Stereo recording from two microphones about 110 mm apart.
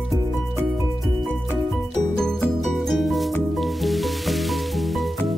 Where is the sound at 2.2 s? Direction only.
5° left (ahead or behind).